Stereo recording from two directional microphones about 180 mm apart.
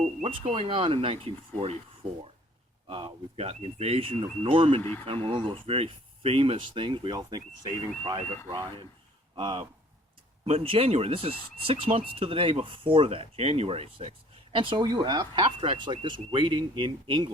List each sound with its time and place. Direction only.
0.0 s speech: 35° right (ahead or behind)
2.9 s speech: 30° right (ahead or behind)
4.8 s speech: 10° left (ahead or behind)
5.0 s speech: 30° right (ahead or behind)
8.4 s speech: 25° right (ahead or behind)